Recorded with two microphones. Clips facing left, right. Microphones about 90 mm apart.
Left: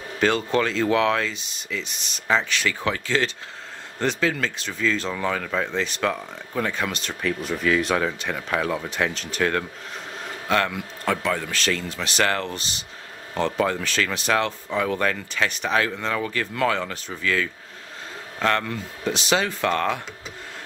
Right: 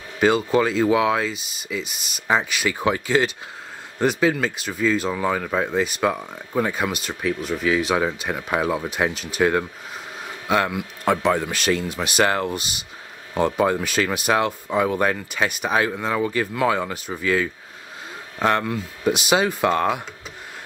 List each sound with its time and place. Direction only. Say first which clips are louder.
0.2 s speech: right 3 dB; 10° right (ahead or behind)